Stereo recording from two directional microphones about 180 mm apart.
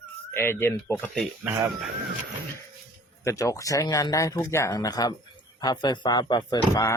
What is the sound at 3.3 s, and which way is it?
Speech, 15° left (ahead or behind).